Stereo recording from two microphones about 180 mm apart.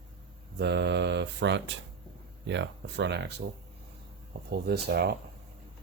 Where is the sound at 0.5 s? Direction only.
70° right (ahead or behind).